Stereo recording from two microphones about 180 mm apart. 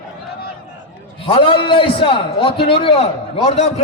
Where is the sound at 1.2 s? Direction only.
30° left (ahead or behind).